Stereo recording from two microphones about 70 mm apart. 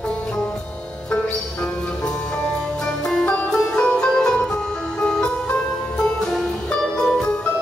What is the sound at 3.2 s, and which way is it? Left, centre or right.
Music, left.